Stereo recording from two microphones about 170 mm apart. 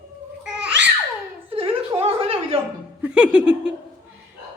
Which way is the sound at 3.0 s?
5° right (ahead or behind).